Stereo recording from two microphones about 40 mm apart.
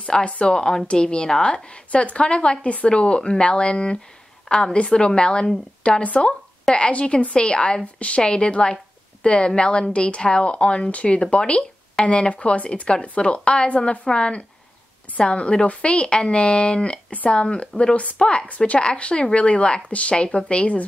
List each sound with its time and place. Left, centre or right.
0.0 s a woman's voice: left